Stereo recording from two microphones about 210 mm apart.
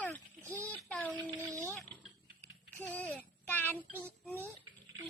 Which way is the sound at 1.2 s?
20° right (ahead or behind).